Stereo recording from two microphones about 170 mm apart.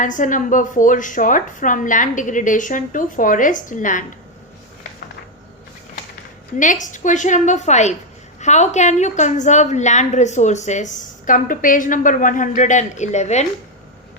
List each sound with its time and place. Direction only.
0.0 s a woman's voice: 50° left (ahead or behind)
6.6 s a woman's voice: 50° left (ahead or behind)